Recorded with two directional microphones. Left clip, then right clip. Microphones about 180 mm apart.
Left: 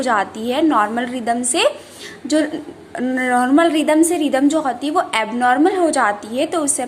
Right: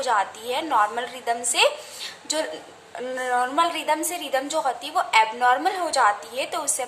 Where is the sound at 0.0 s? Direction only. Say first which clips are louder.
Left 5 dB; 25° left (ahead or behind).